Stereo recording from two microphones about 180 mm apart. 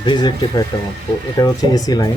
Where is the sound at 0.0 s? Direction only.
25° left (ahead or behind).